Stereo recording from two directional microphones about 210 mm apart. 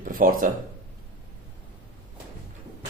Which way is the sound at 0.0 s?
40° right (ahead or behind).